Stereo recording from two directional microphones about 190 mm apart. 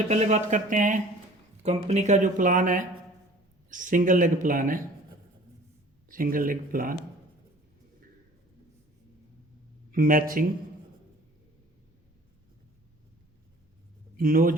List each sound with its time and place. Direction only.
0.1 s speech: 35° right (ahead or behind)
6.1 s speech: 45° right (ahead or behind)
9.9 s speech: 50° right (ahead or behind)
14.2 s speech: 45° right (ahead or behind)